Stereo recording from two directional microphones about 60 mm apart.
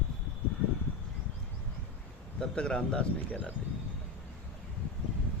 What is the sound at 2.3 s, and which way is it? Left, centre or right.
Speech, centre.